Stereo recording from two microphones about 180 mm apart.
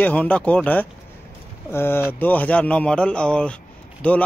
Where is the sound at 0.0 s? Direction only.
10° left (ahead or behind).